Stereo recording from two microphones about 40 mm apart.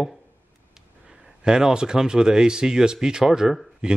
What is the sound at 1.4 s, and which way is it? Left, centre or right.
Speech, centre.